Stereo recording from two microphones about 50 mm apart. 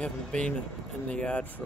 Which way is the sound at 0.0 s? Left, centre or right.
Left.